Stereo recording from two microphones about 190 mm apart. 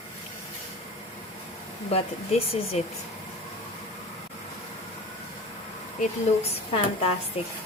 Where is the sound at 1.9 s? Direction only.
35° left (ahead or behind).